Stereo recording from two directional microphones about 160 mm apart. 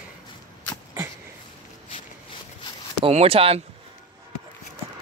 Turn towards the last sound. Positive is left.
turn(degrees=-35)  # may be behind; listen again after turning